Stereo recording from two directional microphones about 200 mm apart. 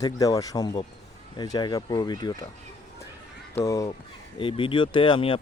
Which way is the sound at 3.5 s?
15° left (ahead or behind).